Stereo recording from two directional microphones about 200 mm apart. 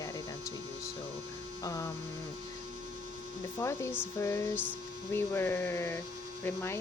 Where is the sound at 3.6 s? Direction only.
15° left (ahead or behind).